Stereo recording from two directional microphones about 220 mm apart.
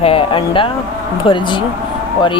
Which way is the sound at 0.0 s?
25° left (ahead or behind).